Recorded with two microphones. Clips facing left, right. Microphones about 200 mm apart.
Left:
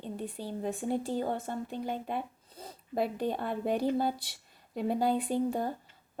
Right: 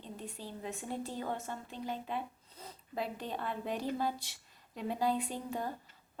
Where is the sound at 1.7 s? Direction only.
50° left (ahead or behind).